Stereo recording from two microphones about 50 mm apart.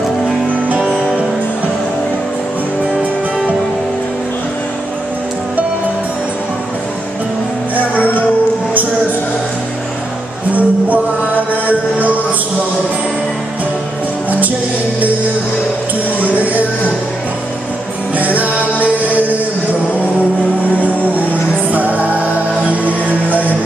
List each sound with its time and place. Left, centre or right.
10.5 s music: right
18.1 s music: right
21.7 s music: right